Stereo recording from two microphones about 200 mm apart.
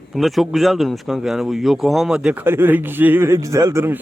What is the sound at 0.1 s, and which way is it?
Speech, centre (ahead or behind).